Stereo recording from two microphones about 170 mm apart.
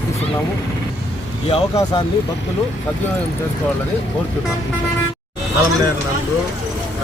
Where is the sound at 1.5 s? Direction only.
30° left (ahead or behind).